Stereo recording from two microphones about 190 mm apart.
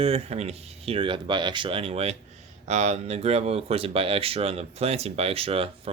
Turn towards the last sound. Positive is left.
turn(degrees=-30)  # may be behind; listen again after turning